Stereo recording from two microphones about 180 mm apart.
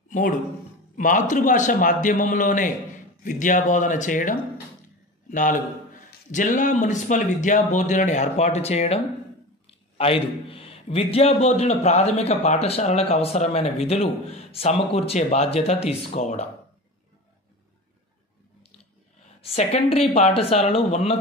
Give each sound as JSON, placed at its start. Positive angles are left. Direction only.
{"t": 0.1, "sound": "a man's voice", "side_deg": 45}
{"t": 19.4, "sound": "a man's voice", "side_deg": 35}